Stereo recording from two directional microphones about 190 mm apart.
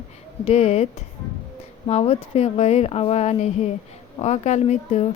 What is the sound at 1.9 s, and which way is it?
Speech, 35° left (ahead or behind).